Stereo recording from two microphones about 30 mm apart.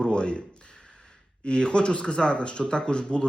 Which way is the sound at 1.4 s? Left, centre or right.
Left.